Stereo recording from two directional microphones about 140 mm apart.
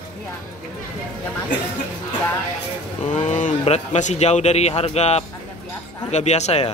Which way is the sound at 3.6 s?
50° left (ahead or behind).